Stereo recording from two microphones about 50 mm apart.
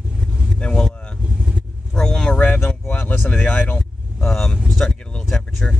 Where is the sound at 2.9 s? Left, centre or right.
Left.